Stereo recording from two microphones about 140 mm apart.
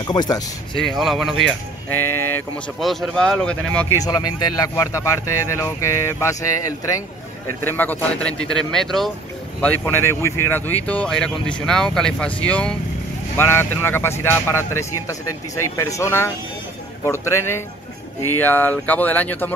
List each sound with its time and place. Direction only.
0.0 s speech: 30° left (ahead or behind)
0.7 s speech: centre (ahead or behind)
1.9 s speech: 15° left (ahead or behind)
2.8 s speech: centre (ahead or behind)
4.0 s speech: 25° left (ahead or behind); by 9.1 s 5° left (ahead or behind)
9.6 s speech: 15° left (ahead or behind)